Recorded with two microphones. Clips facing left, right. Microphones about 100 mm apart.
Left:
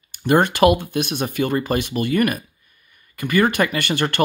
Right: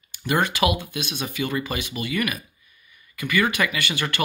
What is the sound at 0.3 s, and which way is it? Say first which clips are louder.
Speech: left 7 dB; 50° left (ahead or behind).